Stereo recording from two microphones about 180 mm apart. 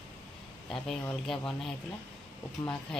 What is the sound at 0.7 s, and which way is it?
Speech, centre (ahead or behind).